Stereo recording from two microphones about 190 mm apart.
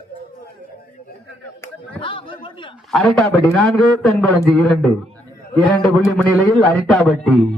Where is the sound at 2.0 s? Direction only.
30° left (ahead or behind).